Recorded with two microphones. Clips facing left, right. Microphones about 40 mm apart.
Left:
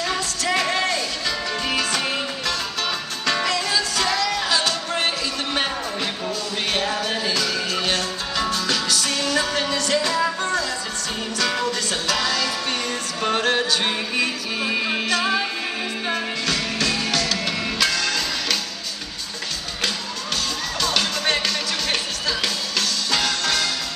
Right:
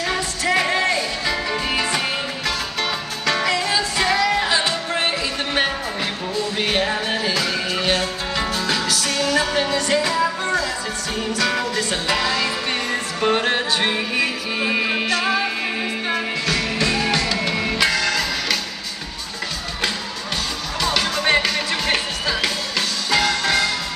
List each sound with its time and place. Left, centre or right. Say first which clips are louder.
0.0 s music: right 2 dB; centre
3.3 s music: right 2 dB; centre
3.5 s music: right 2 dB; right
5.0 s a sound: right 2 dB; centre
6.7 s music: right 1 dB; right
8.9 s music: right 2 dB; centre
12.1 s music: right 1 dB; right
14.9 s music: right 1 dB; centre
16.7 s music: right 3 dB; right
18.0 s music: right 3 dB; centre
20.8 s music: right 3 dB; centre